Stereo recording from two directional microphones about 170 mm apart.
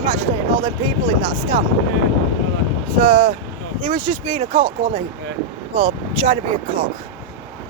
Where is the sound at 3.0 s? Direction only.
45° right (ahead or behind).